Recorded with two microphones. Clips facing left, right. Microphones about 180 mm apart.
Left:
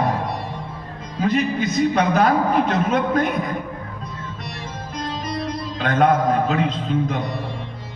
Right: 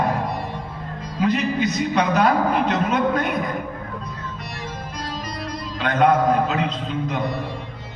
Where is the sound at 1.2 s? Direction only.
50° left (ahead or behind).